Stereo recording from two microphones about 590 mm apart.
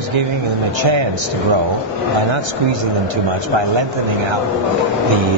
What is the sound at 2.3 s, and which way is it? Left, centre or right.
Speech, right.